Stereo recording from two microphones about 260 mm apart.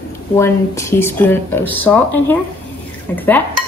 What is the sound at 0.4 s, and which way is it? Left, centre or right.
Speech, centre.